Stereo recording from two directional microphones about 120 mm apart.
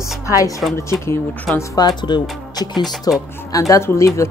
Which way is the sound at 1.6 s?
30° left (ahead or behind).